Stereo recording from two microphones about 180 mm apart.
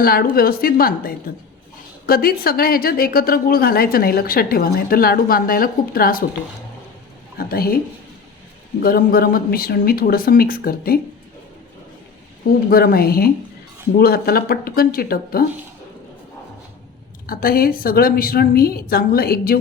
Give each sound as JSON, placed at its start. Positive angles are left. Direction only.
{"t": 0.0, "sound": "a woman's voice", "side_deg": 55}
{"t": 7.3, "sound": "a woman's voice", "side_deg": 55}
{"t": 8.8, "sound": "a woman's voice", "side_deg": 55}
{"t": 12.7, "sound": "a woman's voice", "side_deg": 55}
{"t": 17.2, "sound": "a woman's voice", "side_deg": 55}